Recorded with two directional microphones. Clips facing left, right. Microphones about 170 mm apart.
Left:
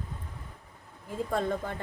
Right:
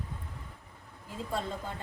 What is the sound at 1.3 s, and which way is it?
Speech, 55° left (ahead or behind).